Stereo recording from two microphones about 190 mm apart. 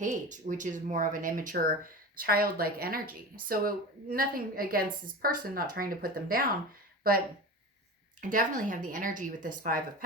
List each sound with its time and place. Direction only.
0.0 s speech: 40° right (ahead or behind)
8.2 s speech: 45° right (ahead or behind)